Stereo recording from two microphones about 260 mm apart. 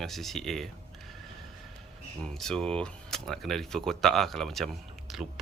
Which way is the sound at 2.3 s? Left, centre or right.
Centre.